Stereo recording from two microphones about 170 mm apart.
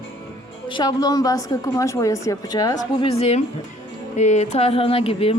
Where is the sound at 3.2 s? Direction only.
40° left (ahead or behind).